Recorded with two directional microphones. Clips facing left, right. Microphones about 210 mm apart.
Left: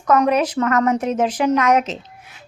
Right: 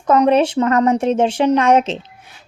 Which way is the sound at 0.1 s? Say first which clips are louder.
Right 3 dB; 30° right (ahead or behind).